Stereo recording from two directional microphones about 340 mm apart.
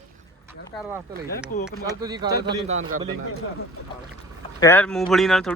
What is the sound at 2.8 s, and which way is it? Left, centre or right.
Speech, right.